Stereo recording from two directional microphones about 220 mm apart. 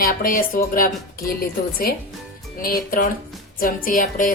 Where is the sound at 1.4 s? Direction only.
40° left (ahead or behind).